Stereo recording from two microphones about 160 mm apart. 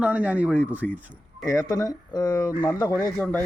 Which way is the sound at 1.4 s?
20° left (ahead or behind).